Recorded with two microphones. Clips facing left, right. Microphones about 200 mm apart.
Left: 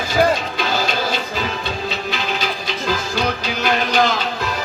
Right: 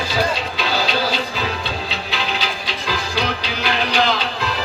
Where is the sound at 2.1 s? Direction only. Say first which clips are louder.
Left 1 dB; 50° left (ahead or behind).